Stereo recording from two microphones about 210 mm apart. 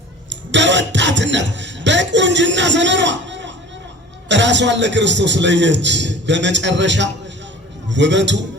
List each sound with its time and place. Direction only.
0.3 s a man's voice: 60° right (ahead or behind)